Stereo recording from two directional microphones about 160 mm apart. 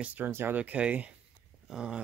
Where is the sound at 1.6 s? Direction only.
5° right (ahead or behind).